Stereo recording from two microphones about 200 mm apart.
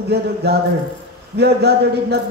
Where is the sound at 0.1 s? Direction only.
55° right (ahead or behind).